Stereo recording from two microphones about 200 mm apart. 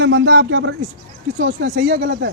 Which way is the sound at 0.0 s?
75° right (ahead or behind).